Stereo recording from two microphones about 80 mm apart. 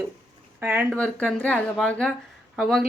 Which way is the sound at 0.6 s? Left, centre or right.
Right.